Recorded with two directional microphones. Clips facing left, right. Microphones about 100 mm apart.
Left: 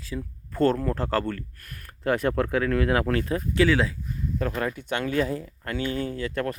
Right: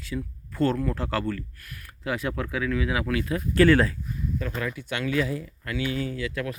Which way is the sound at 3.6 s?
5° left (ahead or behind).